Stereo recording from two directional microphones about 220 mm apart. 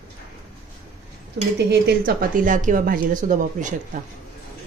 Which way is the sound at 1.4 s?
50° right (ahead or behind).